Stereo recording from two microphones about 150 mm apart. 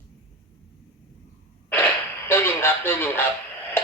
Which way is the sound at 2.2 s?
15° left (ahead or behind).